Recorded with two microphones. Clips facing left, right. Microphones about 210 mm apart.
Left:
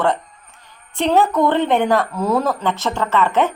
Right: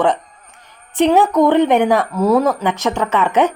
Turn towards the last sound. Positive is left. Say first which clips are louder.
# right 2 dB
turn(degrees=-15)  # may be behind; listen again after turning